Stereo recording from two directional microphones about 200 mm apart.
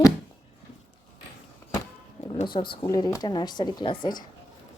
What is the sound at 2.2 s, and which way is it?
Speech, 30° left (ahead or behind).